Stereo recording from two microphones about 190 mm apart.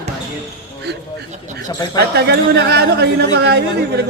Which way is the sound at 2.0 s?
55° right (ahead or behind).